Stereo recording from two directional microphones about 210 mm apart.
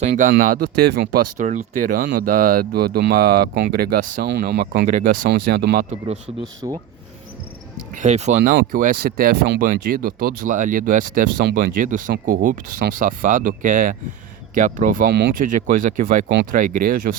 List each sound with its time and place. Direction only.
0.0 s speech: 35° right (ahead or behind)
6.6 s speech: 20° right (ahead or behind)
7.9 s speech: 35° right (ahead or behind)
8.4 s speech: 45° right (ahead or behind)
15.5 s speech: 40° right (ahead or behind)